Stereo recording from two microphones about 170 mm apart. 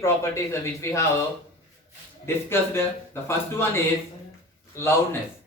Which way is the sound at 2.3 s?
15° left (ahead or behind).